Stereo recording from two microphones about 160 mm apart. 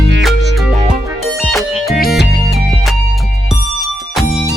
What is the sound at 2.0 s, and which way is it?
Music, 80° left.